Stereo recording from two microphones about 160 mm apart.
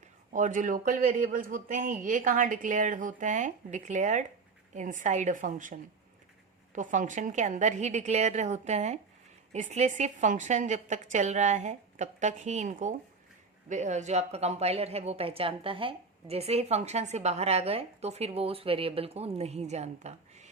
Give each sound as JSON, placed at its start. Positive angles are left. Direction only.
{"t": 0.3, "sound": "a woman's voice", "side_deg": -50}